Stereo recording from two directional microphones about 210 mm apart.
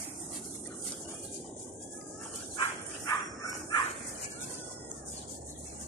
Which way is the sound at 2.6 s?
15° left (ahead or behind).